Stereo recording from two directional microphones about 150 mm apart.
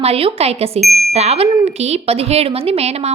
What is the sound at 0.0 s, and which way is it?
Speech, 40° right (ahead or behind).